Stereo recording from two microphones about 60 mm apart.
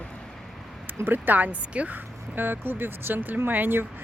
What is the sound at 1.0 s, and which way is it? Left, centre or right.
Speech, right.